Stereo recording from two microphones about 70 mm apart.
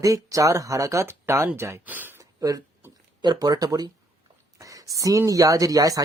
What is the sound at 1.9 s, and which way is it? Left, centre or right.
Speech, right.